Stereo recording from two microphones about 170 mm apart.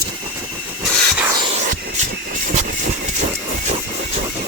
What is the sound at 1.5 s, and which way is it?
Music, 50° right (ahead or behind).